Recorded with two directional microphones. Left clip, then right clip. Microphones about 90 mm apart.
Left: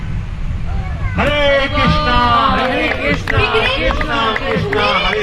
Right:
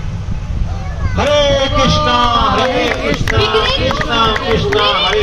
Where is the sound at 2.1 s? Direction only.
10° right (ahead or behind).